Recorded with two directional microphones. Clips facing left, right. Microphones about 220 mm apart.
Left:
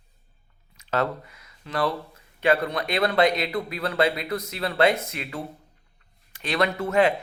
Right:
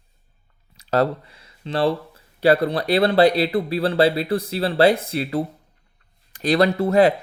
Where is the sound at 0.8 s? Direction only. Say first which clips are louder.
Right 6 dB; 35° right (ahead or behind).